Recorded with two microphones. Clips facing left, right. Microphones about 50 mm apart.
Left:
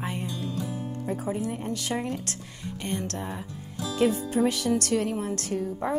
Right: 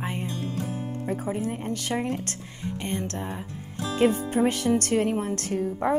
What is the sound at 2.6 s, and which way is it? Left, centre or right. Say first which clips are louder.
Music: right 2 dB; centre.